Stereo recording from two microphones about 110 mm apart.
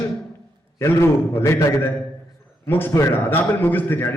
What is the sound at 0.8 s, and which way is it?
A man's voice, 20° left (ahead or behind).